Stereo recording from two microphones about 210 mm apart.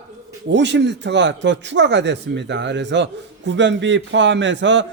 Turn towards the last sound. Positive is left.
turn(degrees=-60)  # may be behind; listen again after turning